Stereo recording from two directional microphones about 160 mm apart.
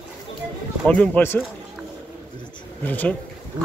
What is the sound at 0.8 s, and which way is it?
Speech, 10° left (ahead or behind).